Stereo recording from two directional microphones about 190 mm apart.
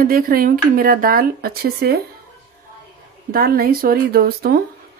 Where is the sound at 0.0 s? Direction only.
50° right (ahead or behind).